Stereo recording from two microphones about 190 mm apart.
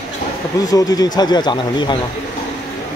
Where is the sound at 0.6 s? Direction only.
20° left (ahead or behind).